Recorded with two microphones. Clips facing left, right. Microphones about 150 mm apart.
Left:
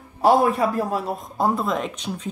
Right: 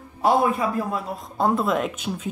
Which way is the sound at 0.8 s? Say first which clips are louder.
Left 3 dB; 35° left (ahead or behind).